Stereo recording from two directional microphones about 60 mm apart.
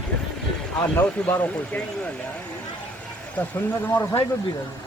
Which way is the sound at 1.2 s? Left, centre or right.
Centre.